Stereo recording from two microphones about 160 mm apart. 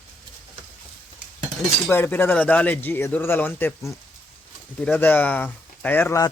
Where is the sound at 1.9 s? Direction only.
10° left (ahead or behind).